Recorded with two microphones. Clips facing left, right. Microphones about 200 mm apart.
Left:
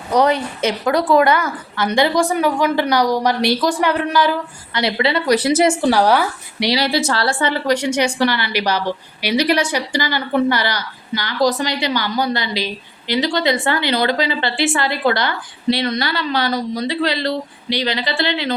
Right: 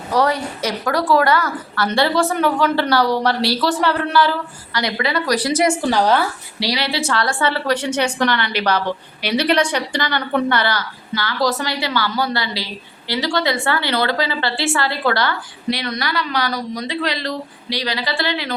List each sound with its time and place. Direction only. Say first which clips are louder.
0.1 s a woman's voice: left 3 dB; 20° left (ahead or behind)
5.7 s a woman's voice: left 2 dB; 10° left (ahead or behind)
6.7 s a woman's voice: left 2 dB; 40° left (ahead or behind)